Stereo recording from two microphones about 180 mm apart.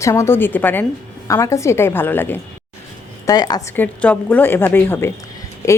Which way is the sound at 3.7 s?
10° left (ahead or behind).